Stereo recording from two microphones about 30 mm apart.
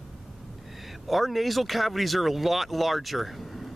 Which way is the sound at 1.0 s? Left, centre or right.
Centre.